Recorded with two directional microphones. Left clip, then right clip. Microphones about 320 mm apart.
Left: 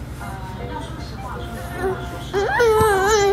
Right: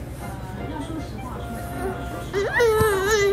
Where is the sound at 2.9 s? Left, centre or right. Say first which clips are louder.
Left 4 dB; centre.